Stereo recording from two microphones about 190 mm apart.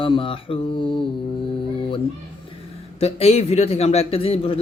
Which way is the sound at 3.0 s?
35° left (ahead or behind).